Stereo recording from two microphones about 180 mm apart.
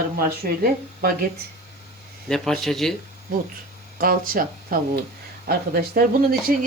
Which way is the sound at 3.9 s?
55° right (ahead or behind).